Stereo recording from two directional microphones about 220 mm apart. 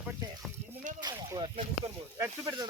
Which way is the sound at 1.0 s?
20° right (ahead or behind).